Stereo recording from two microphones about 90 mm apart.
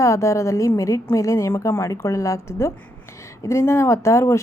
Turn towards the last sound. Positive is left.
turn(degrees=30)  # may be behind; listen again after turning